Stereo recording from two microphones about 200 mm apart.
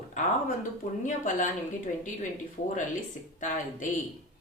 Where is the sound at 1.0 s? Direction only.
40° left (ahead or behind).